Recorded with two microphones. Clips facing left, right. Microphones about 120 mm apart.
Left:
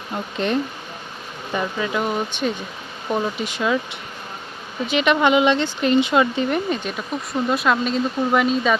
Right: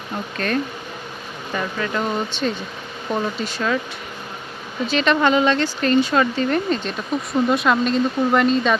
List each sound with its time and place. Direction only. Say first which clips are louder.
0.3 s speech: left 1 dB; 20° left (ahead or behind)
4.9 s speech: even; 15° left (ahead or behind)
7.3 s speech: right 2 dB; centre (ahead or behind)